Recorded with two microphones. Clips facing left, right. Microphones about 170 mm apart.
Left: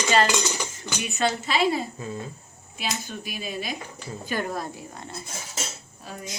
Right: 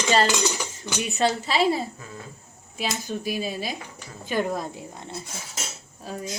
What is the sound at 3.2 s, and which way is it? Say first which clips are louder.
Speech: right 3 dB; 35° right (ahead or behind).